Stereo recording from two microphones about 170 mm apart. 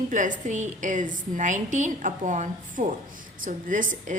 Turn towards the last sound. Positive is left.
turn(degrees=-50)  # may be behind; listen again after turning